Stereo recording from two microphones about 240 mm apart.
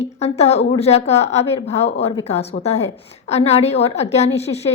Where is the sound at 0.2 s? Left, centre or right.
Left.